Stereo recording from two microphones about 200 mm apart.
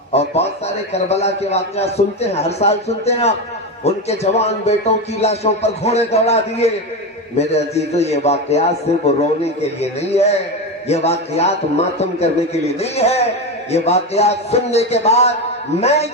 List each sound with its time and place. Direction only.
0.1 s a sound: 30° left (ahead or behind)
0.9 s a man's voice: 30° left (ahead or behind)
12.8 s a man's voice: 30° left (ahead or behind)